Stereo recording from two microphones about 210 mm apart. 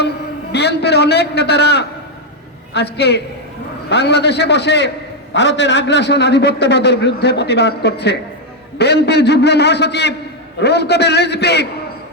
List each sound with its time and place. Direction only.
0.5 s a man's voice: 50° left (ahead or behind)